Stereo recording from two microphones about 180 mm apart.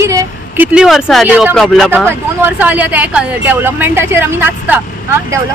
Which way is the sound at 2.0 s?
10° right (ahead or behind).